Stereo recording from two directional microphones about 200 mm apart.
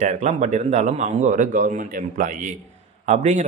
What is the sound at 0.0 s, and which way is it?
Speech, 35° right (ahead or behind).